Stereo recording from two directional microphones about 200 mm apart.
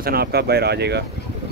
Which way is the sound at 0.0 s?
50° right (ahead or behind).